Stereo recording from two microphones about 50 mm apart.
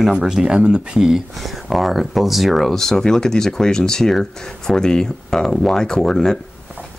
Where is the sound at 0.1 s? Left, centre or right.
Centre.